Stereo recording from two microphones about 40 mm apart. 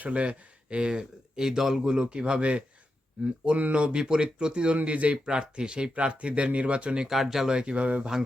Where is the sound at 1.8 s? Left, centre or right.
Right.